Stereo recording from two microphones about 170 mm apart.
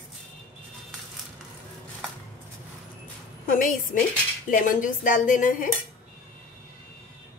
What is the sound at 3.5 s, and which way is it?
A woman's voice, 55° left (ahead or behind).